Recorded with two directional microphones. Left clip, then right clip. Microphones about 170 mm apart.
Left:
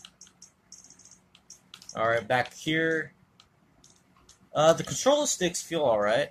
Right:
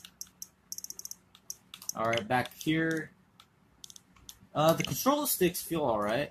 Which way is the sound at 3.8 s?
90° right.